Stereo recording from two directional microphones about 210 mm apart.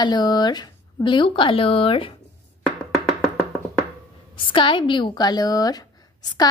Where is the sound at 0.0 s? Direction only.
20° left (ahead or behind).